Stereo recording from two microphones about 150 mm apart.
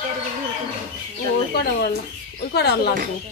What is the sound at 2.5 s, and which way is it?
Speech, 90° left.